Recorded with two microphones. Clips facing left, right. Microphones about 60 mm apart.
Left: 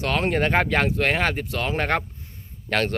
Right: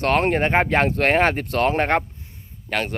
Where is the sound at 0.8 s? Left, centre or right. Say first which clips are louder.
Right 4 dB; right.